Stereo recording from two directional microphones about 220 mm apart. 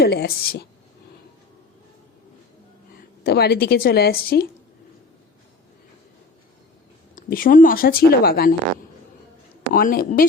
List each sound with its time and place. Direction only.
0.0 s a woman's voice: 45° left (ahead or behind)
3.2 s a woman's voice: 45° left (ahead or behind)
7.2 s speech: 40° left (ahead or behind)
9.7 s speech: 40° left (ahead or behind)